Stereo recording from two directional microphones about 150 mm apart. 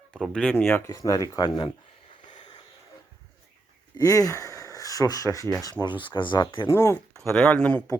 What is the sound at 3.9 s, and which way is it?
Speech, 25° left (ahead or behind).